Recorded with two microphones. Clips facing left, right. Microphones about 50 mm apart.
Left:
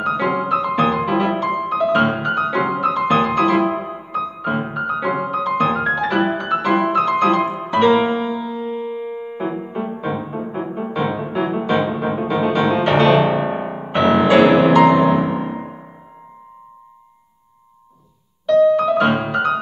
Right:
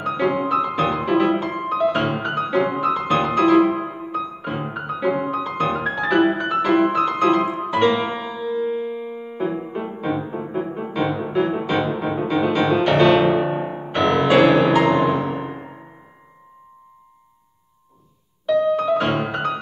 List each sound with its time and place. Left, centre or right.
0.0 s music: centre
5.8 s piano: centre
9.9 s music: centre
13.7 s music: left
14.2 s music: centre
18.4 s music: centre
18.9 s music: centre
19.3 s music: centre